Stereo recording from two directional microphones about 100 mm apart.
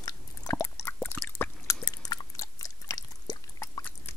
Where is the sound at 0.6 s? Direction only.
20° left (ahead or behind).